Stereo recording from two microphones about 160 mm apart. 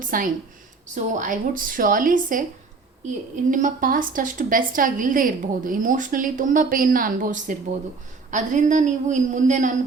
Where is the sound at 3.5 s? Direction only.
55° right (ahead or behind).